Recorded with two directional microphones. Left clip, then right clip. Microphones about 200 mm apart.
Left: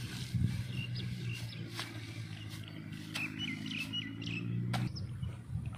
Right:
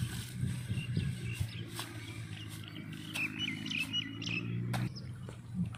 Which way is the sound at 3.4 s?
30° left (ahead or behind).